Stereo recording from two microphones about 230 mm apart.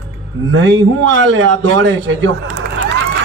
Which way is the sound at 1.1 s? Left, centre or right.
Right.